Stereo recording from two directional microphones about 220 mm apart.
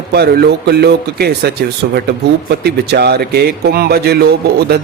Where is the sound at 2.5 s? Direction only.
50° right (ahead or behind).